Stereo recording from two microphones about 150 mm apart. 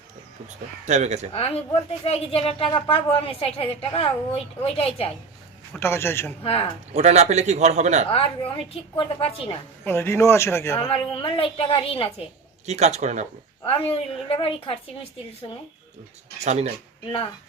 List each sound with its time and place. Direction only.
0.9 s a man's voice: 50° right (ahead or behind)
1.3 s speech: 40° left (ahead or behind)
5.8 s speech: 15° left (ahead or behind)
6.4 s speech: 40° left (ahead or behind)
6.9 s a man's voice: 45° right (ahead or behind)
8.1 s speech: 40° left (ahead or behind)
9.8 s speech: 15° left (ahead or behind)
10.8 s speech: 40° left (ahead or behind)
12.6 s a man's voice: 50° right (ahead or behind)
13.7 s speech: 40° left (ahead or behind)
16.4 s a man's voice: 45° right (ahead or behind)